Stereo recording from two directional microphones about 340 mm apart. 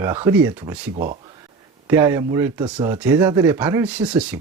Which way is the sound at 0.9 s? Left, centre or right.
Right.